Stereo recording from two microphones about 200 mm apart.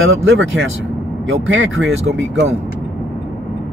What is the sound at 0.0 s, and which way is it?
Speech, 75° right (ahead or behind).